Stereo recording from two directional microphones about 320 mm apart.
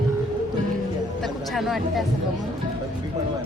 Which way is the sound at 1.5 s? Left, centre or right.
Centre.